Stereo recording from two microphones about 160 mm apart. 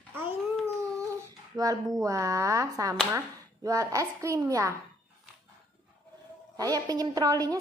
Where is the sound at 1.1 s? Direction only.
20° right (ahead or behind).